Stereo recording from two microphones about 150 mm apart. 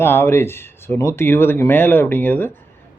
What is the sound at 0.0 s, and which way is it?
Speech, 15° left (ahead or behind).